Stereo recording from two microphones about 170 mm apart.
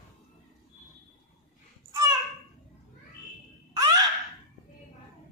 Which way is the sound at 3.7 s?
20° right (ahead or behind).